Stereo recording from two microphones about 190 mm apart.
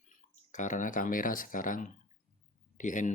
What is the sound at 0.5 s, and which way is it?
Speech, 40° left (ahead or behind).